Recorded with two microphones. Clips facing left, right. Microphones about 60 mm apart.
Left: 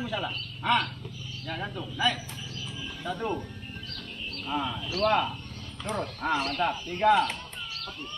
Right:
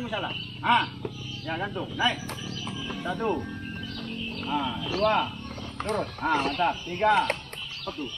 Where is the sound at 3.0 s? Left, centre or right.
Centre.